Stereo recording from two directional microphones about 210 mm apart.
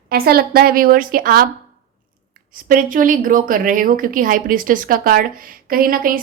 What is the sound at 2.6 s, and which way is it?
Speech, 40° right (ahead or behind).